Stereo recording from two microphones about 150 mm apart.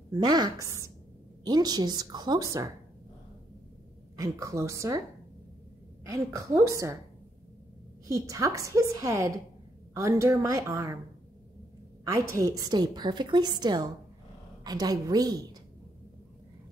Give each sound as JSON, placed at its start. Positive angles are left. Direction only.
{"t": 0.1, "sound": "a woman's voice", "side_deg": -25}
{"t": 4.2, "sound": "a woman's voice", "side_deg": -20}
{"t": 6.0, "sound": "a woman's voice", "side_deg": -20}
{"t": 8.1, "sound": "a woman's voice", "side_deg": -20}
{"t": 12.0, "sound": "a woman's voice", "side_deg": -20}